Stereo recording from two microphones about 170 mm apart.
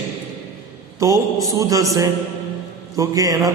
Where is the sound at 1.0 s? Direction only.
20° right (ahead or behind).